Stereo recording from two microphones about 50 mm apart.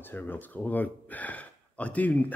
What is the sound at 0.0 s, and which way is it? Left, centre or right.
Speech, left.